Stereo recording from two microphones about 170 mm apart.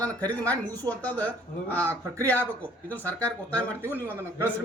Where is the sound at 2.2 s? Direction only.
10° left (ahead or behind).